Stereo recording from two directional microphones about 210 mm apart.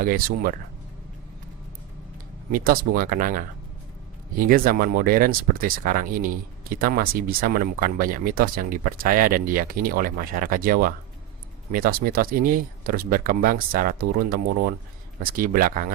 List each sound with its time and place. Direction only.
0.0 s speech: 45° right (ahead or behind)
2.5 s speech: 40° right (ahead or behind)